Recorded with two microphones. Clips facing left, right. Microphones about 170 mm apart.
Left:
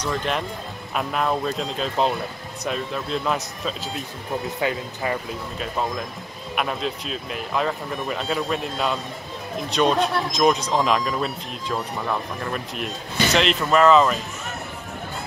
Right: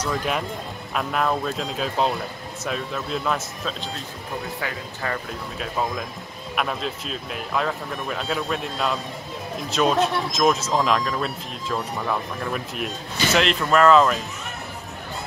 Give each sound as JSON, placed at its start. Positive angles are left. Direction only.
{"t": 0.0, "sound": "speech", "side_deg": -5}
{"t": 4.6, "sound": "speech", "side_deg": 20}
{"t": 5.6, "sound": "speech", "side_deg": 0}